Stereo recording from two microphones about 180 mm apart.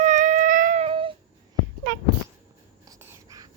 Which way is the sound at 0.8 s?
30° right (ahead or behind).